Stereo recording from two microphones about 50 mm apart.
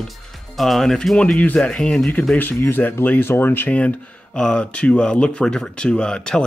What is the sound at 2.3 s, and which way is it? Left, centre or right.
Speech, left.